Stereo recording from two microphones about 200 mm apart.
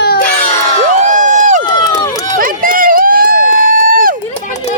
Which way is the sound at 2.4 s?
45° right (ahead or behind).